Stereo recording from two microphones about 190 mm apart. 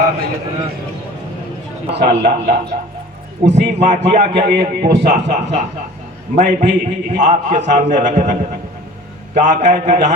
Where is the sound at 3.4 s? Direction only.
65° right (ahead or behind).